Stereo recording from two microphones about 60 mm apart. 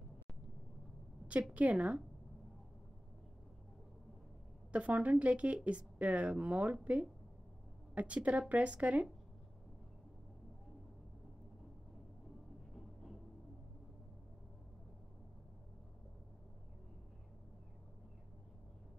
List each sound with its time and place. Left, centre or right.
1.5 s speech: right
4.7 s speech: right
12.7 s music: centre